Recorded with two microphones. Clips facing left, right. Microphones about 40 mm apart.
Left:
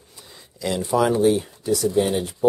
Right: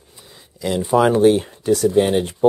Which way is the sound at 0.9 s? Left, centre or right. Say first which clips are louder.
Right 5 dB; right.